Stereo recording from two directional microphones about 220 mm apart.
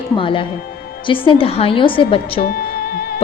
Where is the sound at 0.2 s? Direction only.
25° left (ahead or behind).